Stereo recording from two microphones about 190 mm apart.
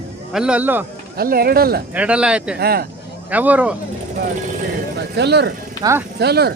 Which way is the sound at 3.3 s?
10° right (ahead or behind).